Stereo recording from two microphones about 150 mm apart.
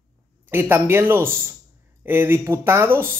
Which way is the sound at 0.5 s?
15° right (ahead or behind).